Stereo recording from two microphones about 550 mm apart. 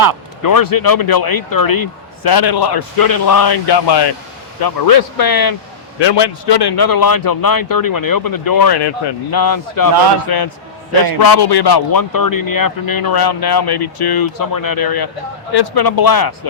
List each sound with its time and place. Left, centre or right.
0.4 s a man's voice: left